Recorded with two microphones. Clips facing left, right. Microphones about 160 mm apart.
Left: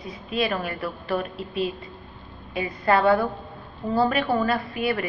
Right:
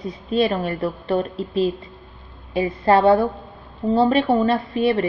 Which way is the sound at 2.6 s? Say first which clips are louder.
Right 5 dB; 30° right (ahead or behind).